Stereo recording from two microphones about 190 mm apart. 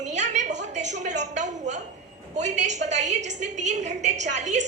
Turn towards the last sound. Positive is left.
turn(degrees=-40)  # may be behind; listen again after turning